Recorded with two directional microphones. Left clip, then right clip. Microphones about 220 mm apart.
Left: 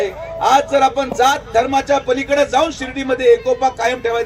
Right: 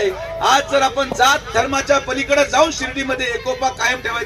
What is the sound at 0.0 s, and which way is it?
A man's voice, 50° left (ahead or behind).